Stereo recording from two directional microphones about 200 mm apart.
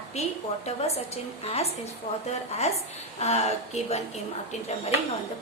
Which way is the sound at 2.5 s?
30° left (ahead or behind).